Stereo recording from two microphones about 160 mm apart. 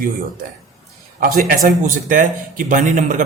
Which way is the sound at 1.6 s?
55° right (ahead or behind).